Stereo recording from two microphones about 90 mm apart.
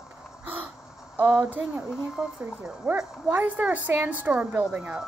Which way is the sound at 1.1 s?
15° right (ahead or behind).